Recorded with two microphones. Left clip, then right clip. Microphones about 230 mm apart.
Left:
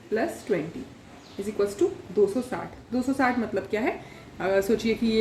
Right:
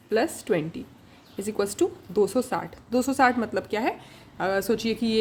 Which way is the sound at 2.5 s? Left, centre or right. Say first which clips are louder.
Right 5 dB; right.